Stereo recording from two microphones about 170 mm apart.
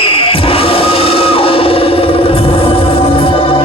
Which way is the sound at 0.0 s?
35° left (ahead or behind).